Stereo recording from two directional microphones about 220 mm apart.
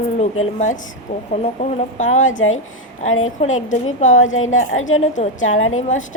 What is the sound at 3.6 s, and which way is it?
Speech, 35° left (ahead or behind).